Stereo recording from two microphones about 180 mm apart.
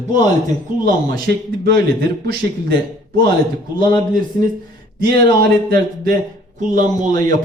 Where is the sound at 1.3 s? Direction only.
60° right (ahead or behind).